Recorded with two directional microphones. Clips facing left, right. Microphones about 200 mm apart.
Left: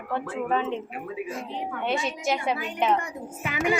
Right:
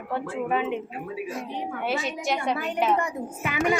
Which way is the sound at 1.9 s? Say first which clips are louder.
Left 1 dB; centre (ahead or behind).